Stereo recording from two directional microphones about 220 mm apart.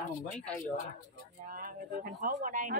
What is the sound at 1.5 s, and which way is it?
Speech, 40° right (ahead or behind).